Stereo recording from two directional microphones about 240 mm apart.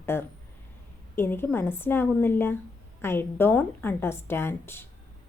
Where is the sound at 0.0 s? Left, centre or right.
Centre.